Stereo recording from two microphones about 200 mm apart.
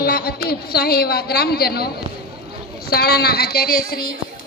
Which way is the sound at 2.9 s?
50° left (ahead or behind).